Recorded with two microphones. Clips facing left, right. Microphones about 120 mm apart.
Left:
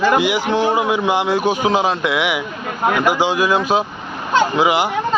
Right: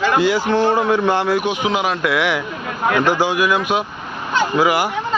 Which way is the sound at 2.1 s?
20° left (ahead or behind).